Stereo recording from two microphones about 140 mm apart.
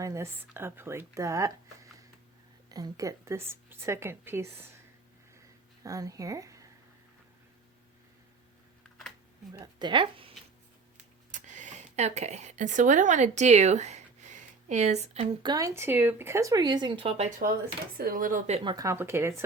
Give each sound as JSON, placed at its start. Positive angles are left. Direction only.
{"t": 0.0, "sound": "speech", "side_deg": -20}
{"t": 5.8, "sound": "speech", "side_deg": -25}
{"t": 9.5, "sound": "speech", "side_deg": -30}
{"t": 11.3, "sound": "speech", "side_deg": -60}
{"t": 15.4, "sound": "speech", "side_deg": -25}
{"t": 17.9, "sound": "speech", "side_deg": -85}
{"t": 18.6, "sound": "speech", "side_deg": -35}
{"t": 18.9, "sound": "speech", "side_deg": -20}